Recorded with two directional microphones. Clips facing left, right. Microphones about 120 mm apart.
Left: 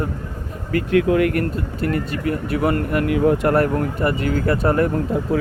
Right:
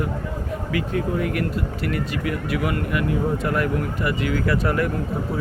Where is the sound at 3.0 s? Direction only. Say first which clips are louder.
Left 9 dB; 80° left.